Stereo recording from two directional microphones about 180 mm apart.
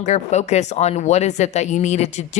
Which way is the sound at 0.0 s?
40° left (ahead or behind).